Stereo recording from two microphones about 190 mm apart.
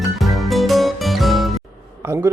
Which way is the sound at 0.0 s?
Centre (ahead or behind).